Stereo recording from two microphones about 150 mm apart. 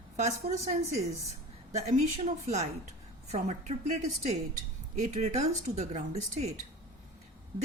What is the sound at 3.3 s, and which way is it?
A woman's voice, 50° right (ahead or behind).